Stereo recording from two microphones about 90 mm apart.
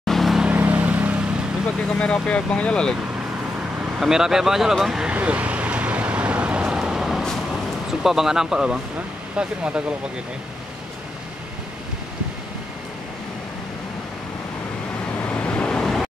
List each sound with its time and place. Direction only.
0.0 s vehicle: centre (ahead or behind)
0.5 s vehicle: 20° right (ahead or behind)
2.0 s speech: 10° left (ahead or behind)
4.0 s speech: 5° right (ahead or behind)
5.1 s vehicle: 15° right (ahead or behind)
8.0 s speech: 5° right (ahead or behind)
15.2 s vehicle: 15° left (ahead or behind)